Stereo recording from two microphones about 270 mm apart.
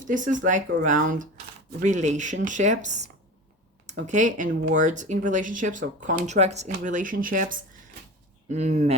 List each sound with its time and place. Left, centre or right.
0.0 s speech: right